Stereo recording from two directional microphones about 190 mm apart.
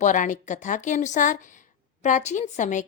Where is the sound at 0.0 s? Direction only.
40° left (ahead or behind).